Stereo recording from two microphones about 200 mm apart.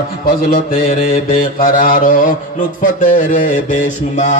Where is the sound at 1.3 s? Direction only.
45° left (ahead or behind).